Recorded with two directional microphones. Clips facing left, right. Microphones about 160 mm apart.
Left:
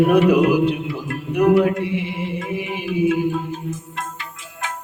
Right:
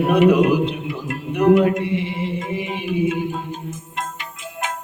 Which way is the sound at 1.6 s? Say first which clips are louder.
Right 1 dB; 10° left (ahead or behind).